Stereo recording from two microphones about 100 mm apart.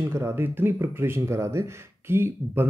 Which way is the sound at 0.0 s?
25° right (ahead or behind).